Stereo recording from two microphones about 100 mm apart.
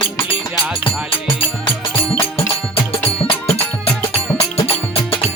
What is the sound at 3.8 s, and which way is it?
Music, 80° left.